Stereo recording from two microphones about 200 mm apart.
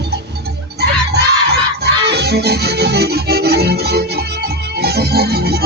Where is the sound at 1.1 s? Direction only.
55° right (ahead or behind).